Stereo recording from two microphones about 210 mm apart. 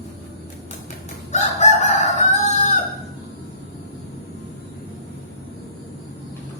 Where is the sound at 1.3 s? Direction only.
35° left (ahead or behind).